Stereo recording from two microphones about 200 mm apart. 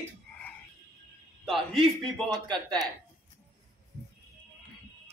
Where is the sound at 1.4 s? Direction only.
Centre (ahead or behind).